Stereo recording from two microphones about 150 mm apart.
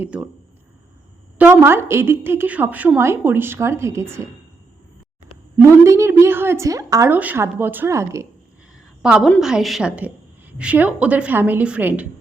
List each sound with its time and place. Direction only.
0.0 s a woman's voice: 10° right (ahead or behind)
1.4 s a woman's voice: 15° right (ahead or behind)
5.5 s a woman's voice: 20° right (ahead or behind)
9.0 s a woman's voice: 5° right (ahead or behind)